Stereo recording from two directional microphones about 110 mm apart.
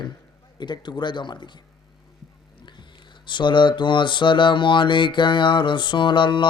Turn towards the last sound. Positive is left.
turn(degrees=45)  # may be behind; listen again after turning